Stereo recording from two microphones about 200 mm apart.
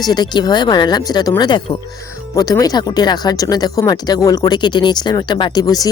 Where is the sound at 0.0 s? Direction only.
20° left (ahead or behind).